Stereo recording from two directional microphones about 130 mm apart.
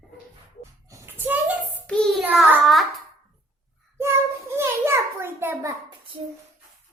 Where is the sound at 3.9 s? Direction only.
20° right (ahead or behind).